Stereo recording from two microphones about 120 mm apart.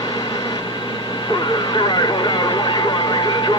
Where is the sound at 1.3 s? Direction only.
40° left (ahead or behind).